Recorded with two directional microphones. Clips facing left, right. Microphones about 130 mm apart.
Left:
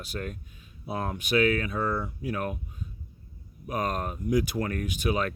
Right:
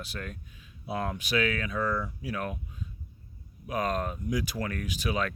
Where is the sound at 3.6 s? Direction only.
45° left (ahead or behind).